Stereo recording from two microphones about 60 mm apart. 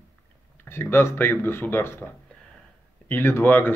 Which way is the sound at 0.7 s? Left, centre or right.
Left.